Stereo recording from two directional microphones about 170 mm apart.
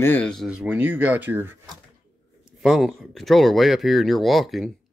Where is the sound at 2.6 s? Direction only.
Centre (ahead or behind).